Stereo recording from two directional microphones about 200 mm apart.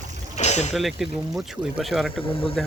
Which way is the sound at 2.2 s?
30° left (ahead or behind).